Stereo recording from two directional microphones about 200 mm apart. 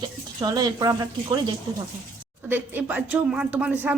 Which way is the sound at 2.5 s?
10° right (ahead or behind).